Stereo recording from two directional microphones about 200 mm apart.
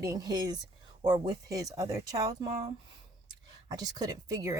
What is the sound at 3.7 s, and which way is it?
Speech, 20° right (ahead or behind).